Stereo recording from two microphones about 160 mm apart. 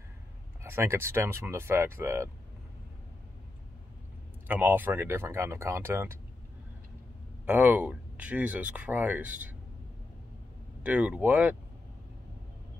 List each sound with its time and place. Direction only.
0.7 s speech: 15° right (ahead or behind)
4.5 s speech: 10° right (ahead or behind)
7.4 s speech: 10° right (ahead or behind)
10.8 s speech: 10° right (ahead or behind)